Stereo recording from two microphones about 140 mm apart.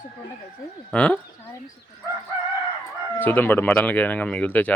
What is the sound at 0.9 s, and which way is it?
Speech, 10° left (ahead or behind).